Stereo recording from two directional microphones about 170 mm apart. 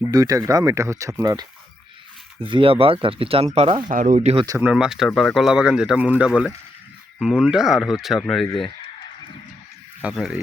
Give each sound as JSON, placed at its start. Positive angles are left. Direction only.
{"t": 0.1, "sound": "speech", "side_deg": -20}
{"t": 2.4, "sound": "speech", "side_deg": -30}
{"t": 3.8, "sound": "speech", "side_deg": -50}
{"t": 4.4, "sound": "speech", "side_deg": -10}
{"t": 10.0, "sound": "speech", "side_deg": 0}